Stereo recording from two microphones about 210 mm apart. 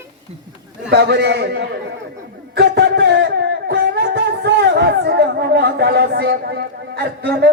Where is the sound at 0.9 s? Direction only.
50° right (ahead or behind).